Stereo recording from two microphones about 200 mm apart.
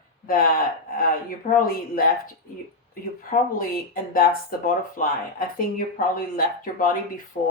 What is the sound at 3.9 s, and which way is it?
Speech, 45° left (ahead or behind).